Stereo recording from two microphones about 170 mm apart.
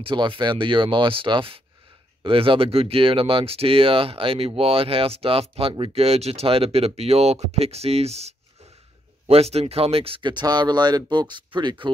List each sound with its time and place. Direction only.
0.0 s speech: 30° right (ahead or behind)